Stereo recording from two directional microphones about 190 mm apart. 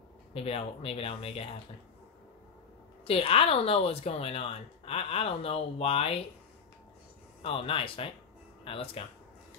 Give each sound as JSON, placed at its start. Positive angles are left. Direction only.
{"t": 0.3, "sound": "a woman's voice", "side_deg": 30}
{"t": 3.1, "sound": "a woman's voice", "side_deg": 30}
{"t": 7.4, "sound": "speech", "side_deg": 30}